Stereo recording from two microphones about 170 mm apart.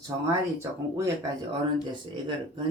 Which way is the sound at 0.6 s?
15° right (ahead or behind).